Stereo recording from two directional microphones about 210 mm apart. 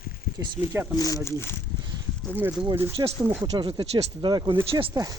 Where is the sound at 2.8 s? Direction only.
20° right (ahead or behind).